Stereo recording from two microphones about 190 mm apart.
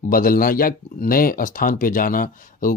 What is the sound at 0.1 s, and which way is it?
Speech, 50° left (ahead or behind).